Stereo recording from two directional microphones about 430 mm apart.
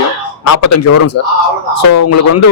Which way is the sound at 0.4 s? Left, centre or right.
Left.